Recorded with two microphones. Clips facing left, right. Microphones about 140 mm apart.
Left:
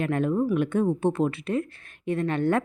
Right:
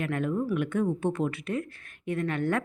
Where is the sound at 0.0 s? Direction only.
30° left (ahead or behind).